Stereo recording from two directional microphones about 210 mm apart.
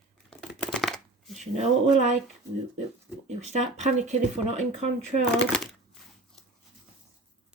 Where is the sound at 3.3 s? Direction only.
30° right (ahead or behind).